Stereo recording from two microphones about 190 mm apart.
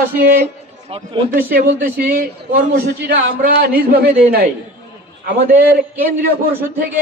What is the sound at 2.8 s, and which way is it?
A man's voice, 55° right (ahead or behind).